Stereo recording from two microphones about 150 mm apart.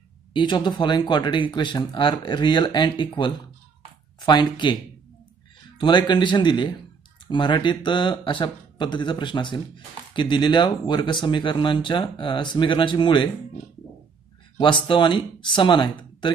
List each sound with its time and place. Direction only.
0.3 s speech: 30° left (ahead or behind)
5.8 s speech: 30° left (ahead or behind)
14.6 s speech: 30° left (ahead or behind)